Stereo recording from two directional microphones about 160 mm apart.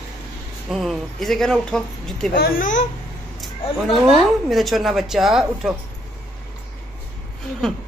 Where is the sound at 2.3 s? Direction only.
70° left (ahead or behind).